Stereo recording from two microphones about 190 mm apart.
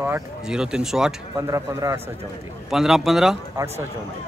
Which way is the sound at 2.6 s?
Centre (ahead or behind).